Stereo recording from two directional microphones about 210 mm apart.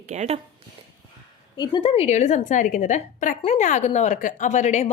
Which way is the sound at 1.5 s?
20° left (ahead or behind).